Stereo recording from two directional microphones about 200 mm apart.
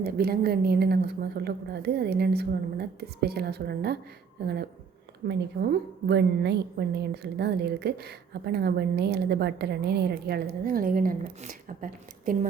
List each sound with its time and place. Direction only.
0.0 s a woman's voice: 50° right (ahead or behind)
5.2 s a woman's voice: 45° right (ahead or behind)
6.1 s a woman's voice: 55° right (ahead or behind)